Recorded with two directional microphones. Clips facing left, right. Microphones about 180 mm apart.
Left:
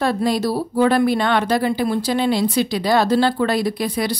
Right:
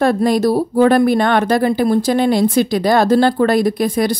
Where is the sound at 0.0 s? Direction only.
50° right (ahead or behind).